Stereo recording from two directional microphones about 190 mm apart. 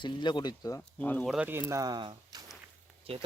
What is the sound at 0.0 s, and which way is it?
Speech, 25° left (ahead or behind).